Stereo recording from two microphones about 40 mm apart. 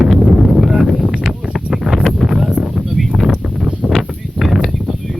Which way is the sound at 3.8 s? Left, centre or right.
Right.